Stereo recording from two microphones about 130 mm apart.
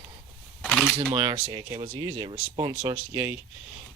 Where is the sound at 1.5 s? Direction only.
30° right (ahead or behind).